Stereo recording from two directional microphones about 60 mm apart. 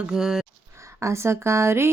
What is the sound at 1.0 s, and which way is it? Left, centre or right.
Speech, right.